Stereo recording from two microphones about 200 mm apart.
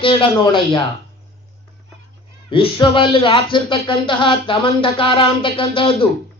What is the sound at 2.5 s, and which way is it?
Speech, 25° left (ahead or behind).